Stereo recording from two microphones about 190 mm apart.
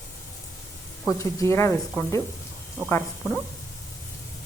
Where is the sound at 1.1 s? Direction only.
15° left (ahead or behind).